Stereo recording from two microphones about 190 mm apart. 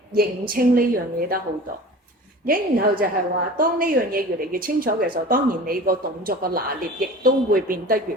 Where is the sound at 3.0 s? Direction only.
50° right (ahead or behind).